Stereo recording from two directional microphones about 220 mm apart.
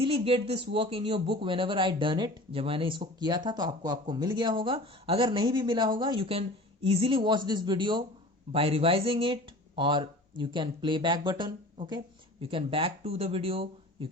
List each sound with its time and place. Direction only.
0.0 s speech: 25° right (ahead or behind)